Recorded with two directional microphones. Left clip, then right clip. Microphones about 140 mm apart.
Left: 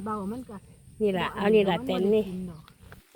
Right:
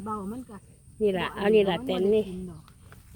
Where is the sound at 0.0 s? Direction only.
90° left.